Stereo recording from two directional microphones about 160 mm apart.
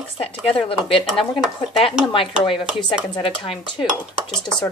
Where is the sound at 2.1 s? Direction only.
35° left (ahead or behind).